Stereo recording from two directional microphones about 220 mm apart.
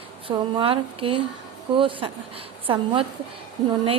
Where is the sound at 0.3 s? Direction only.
25° right (ahead or behind).